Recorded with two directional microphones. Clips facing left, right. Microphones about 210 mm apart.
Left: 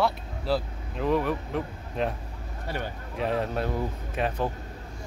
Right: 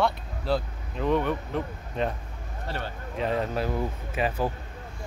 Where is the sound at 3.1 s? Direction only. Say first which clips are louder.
Even; centre (ahead or behind).